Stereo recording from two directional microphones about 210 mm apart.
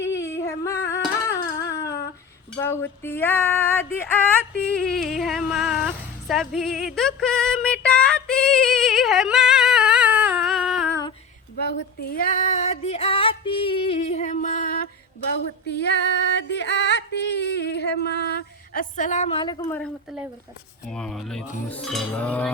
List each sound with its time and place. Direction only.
0.2 s a sound: 15° left (ahead or behind)
4.9 s female singing: centre (ahead or behind)
11.6 s music: 45° left (ahead or behind)
15.3 s yodeling: 55° left (ahead or behind); by 19.8 s 20° left (ahead or behind)
20.8 s speech: 5° left (ahead or behind)
21.7 s a sound: 5° left (ahead or behind)